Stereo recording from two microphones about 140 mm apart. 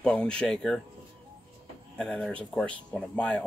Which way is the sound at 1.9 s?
5° left (ahead or behind).